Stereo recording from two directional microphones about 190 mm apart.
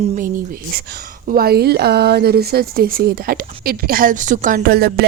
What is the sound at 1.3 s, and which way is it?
A woman's voice, 55° right (ahead or behind).